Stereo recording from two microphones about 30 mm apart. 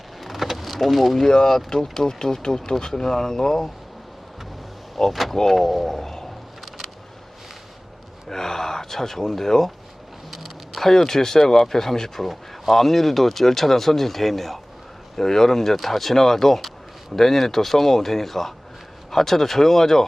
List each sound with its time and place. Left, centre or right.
0.2 s vehicle: centre
1.3 s speech: left
5.0 s speech: centre
8.3 s speech: centre
10.3 s a sound: centre
10.8 s speech: centre